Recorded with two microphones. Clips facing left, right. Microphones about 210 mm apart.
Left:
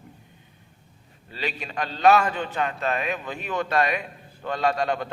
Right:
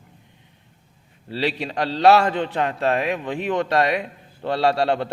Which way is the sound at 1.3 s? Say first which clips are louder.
Right 8 dB; 80° right.